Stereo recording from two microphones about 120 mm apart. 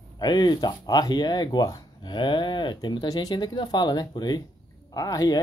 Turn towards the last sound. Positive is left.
turn(degrees=30)  # may be behind; listen again after turning